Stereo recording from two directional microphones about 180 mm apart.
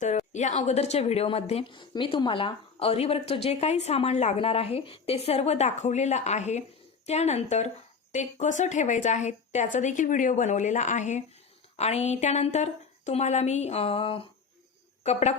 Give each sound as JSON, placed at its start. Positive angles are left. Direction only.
{"t": 0.0, "sound": "a woman's voice", "side_deg": 40}